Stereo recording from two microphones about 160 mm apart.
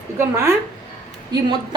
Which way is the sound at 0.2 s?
15° right (ahead or behind).